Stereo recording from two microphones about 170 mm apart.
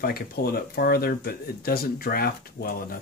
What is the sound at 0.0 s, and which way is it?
Speech, 65° left (ahead or behind).